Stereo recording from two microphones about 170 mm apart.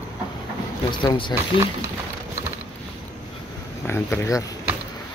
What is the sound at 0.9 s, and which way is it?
Speech, 25° left (ahead or behind).